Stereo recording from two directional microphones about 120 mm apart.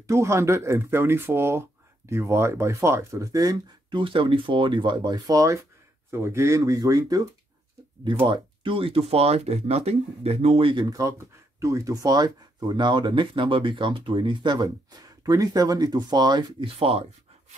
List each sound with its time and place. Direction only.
0.0 s speech: 25° right (ahead or behind)
4.0 s speech: 45° right (ahead or behind)
8.3 s speech: 45° right (ahead or behind)
10.9 s speech: 30° right (ahead or behind); by 17.0 s 50° right (ahead or behind)